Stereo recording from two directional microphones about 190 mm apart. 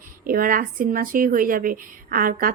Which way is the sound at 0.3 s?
50° right (ahead or behind).